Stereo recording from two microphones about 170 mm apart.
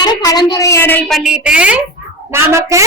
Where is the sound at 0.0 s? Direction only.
25° left (ahead or behind).